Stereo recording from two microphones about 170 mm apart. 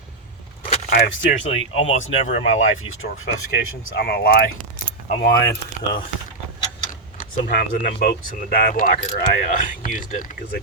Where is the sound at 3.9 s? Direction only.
70° left (ahead or behind).